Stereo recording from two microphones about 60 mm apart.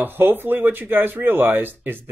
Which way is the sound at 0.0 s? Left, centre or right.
Right.